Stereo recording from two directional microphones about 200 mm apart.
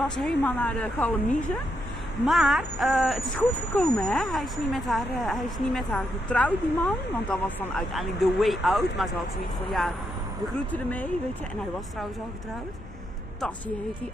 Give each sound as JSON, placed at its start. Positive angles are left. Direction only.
{"t": 0.1, "sound": "a woman's voice", "side_deg": 5}